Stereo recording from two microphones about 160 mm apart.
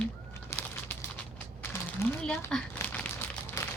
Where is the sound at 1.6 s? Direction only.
15° left (ahead or behind).